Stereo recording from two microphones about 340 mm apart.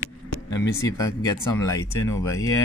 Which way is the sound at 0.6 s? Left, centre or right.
Centre.